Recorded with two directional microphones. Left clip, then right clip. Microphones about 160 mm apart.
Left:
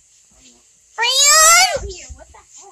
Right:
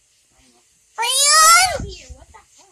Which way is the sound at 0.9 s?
10° left (ahead or behind).